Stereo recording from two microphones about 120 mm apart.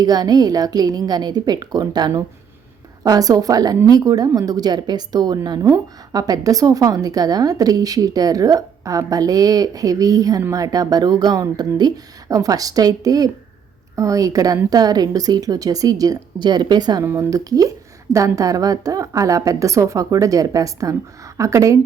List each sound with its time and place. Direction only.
0.0 s a woman's voice: 35° right (ahead or behind)
17.0 s a woman's voice: 20° right (ahead or behind)